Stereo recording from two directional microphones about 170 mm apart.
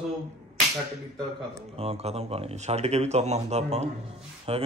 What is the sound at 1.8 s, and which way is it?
A man's voice, 35° right (ahead or behind).